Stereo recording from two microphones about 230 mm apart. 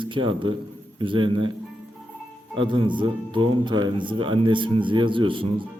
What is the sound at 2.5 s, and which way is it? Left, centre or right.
Speech, right.